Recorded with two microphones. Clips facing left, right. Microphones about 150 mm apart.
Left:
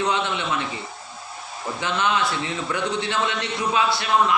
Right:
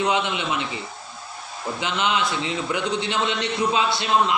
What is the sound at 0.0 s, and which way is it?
Speech, 15° right (ahead or behind).